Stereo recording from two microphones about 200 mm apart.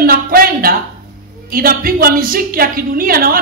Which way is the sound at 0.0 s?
45° right (ahead or behind).